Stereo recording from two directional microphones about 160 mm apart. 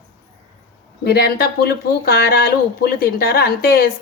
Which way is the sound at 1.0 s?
85° left.